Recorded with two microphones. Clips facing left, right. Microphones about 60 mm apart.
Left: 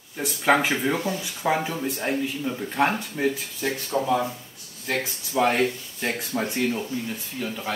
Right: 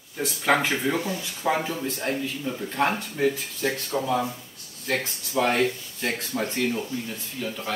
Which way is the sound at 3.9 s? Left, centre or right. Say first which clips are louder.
Left 5 dB; centre.